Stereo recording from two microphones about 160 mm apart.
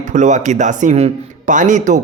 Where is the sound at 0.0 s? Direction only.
50° right (ahead or behind).